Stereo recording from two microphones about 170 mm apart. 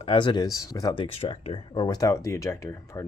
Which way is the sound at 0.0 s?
30° left (ahead or behind).